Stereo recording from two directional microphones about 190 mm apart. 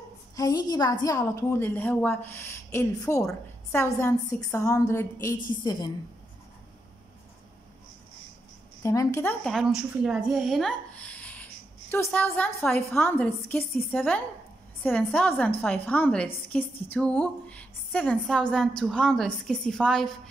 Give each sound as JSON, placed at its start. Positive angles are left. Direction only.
{"t": 0.4, "sound": "a woman's voice", "side_deg": 20}
{"t": 8.8, "sound": "a woman's voice", "side_deg": 15}
{"t": 9.5, "sound": "a woman's voice", "side_deg": 0}